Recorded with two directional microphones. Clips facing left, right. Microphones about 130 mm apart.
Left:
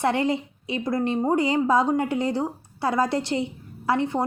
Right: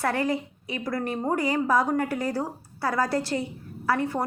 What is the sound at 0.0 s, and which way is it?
A woman's voice, 25° left (ahead or behind).